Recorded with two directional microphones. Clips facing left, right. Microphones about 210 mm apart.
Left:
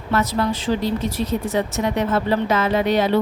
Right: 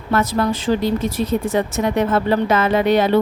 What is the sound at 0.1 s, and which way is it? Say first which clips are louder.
Speech: right 2 dB; 50° right (ahead or behind).